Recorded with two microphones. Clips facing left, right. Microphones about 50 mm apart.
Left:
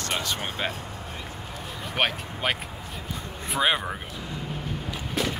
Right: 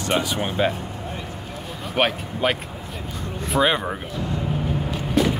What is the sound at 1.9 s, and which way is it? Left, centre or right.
Speech, centre.